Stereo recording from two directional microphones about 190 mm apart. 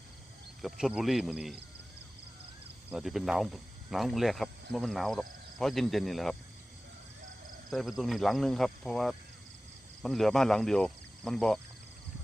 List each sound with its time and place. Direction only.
0.6 s speech: centre (ahead or behind)
2.9 s speech: centre (ahead or behind)
7.7 s speech: centre (ahead or behind)